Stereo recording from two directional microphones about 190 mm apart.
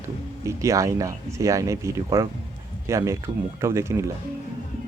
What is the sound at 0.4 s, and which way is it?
A man's voice, 15° right (ahead or behind).